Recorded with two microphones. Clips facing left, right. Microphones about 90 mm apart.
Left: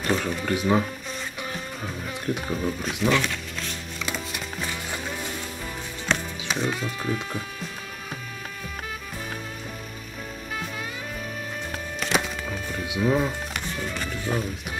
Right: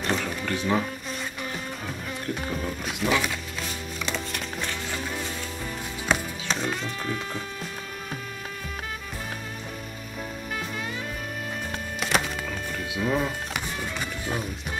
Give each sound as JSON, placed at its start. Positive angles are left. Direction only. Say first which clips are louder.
{"t": 0.0, "sound": "speech", "louder": "left 2 dB", "side_deg": 5}
{"t": 2.3, "sound": "speech", "louder": "left 3 dB", "side_deg": 10}
{"t": 2.8, "sound": "speech", "louder": "left 1 dB", "side_deg": -5}
{"t": 4.0, "sound": "music", "louder": "even", "side_deg": 5}
{"t": 6.1, "sound": "music", "louder": "right 1 dB", "side_deg": -5}
{"t": 6.4, "sound": "speech", "louder": "left 1 dB", "side_deg": 5}
{"t": 12.0, "sound": "music", "louder": "even", "side_deg": 5}
{"t": 13.1, "sound": "music", "louder": "left 2 dB", "side_deg": 0}